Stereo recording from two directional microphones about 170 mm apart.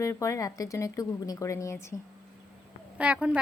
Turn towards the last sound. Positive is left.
turn(degrees=-5)  # may be behind; listen again after turning